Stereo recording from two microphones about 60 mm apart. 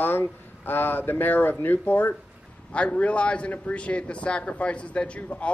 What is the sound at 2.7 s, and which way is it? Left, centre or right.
A man's voice, left.